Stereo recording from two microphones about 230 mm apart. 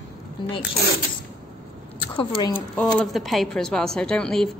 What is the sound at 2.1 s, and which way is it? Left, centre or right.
Speech, centre.